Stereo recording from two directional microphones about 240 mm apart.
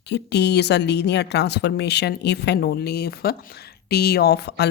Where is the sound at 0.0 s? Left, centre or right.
Left.